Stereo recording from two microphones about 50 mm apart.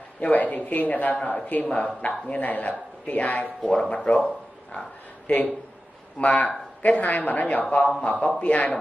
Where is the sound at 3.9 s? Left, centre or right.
Left.